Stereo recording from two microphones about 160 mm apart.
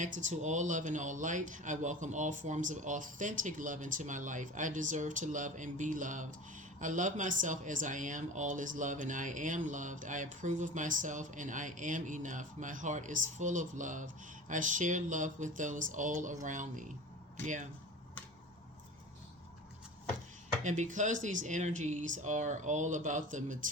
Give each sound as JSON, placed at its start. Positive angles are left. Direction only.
{"t": 0.0, "sound": "speech", "side_deg": -50}
{"t": 20.7, "sound": "speech", "side_deg": -50}